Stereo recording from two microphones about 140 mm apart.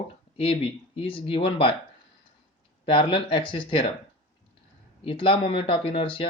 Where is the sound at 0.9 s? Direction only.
40° left (ahead or behind).